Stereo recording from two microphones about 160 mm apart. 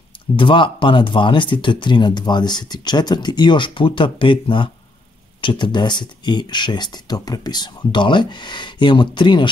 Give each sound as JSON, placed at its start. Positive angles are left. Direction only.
{"t": 0.4, "sound": "speech", "side_deg": 30}